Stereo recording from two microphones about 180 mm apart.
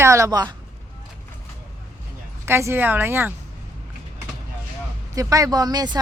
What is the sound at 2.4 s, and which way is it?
Speech, 15° right (ahead or behind).